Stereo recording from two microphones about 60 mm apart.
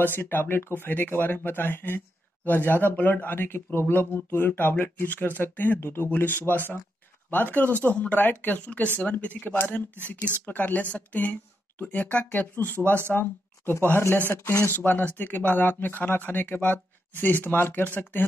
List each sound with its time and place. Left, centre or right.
0.0 s speech: left
14.4 s speech: left
14.7 s speech: left